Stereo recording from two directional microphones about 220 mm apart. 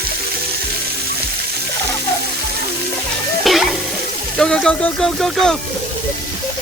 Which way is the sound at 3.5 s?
Centre (ahead or behind).